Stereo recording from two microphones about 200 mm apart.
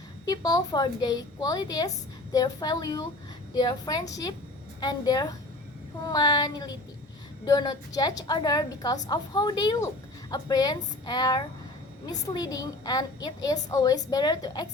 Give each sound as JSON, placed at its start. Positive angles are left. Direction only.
{"t": 0.3, "sound": "a woman's voice", "side_deg": 20}